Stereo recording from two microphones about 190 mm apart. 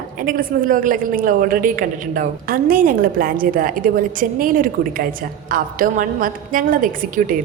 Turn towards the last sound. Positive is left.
turn(degrees=-45)  # may be behind; listen again after turning